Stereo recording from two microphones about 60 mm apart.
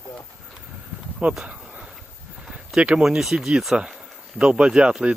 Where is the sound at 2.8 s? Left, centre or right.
Centre.